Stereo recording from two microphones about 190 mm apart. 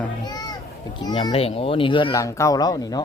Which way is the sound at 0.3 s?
20° left (ahead or behind).